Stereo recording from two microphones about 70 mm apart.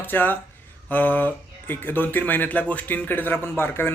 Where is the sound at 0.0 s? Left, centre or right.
Left.